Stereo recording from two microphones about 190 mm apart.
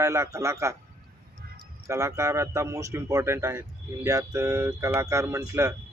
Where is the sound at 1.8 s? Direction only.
15° right (ahead or behind).